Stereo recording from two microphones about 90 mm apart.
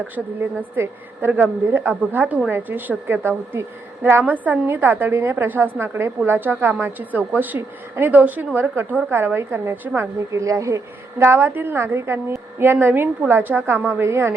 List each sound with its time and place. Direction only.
0.6 s a woman's voice: 20° right (ahead or behind)